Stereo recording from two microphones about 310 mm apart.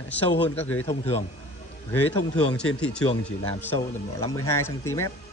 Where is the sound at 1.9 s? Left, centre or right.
Centre.